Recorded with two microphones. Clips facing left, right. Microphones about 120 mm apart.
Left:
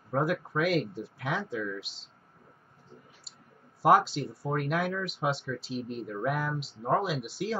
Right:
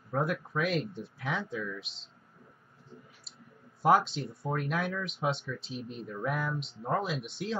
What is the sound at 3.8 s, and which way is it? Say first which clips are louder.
Speech: left 2 dB; centre (ahead or behind).